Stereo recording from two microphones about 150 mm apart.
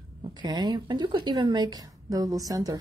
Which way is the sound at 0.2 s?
30° right (ahead or behind).